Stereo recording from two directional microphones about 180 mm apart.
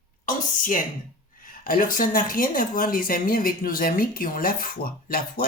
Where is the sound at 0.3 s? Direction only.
45° left (ahead or behind).